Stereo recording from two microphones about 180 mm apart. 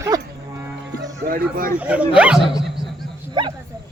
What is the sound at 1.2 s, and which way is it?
Speech, 55° right (ahead or behind).